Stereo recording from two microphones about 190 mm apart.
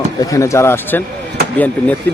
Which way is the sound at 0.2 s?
15° left (ahead or behind).